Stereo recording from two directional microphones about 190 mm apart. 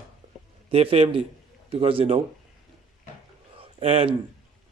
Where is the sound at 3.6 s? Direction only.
30° right (ahead or behind).